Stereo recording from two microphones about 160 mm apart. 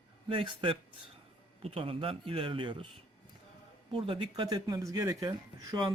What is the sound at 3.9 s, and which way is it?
Speech, 35° right (ahead or behind).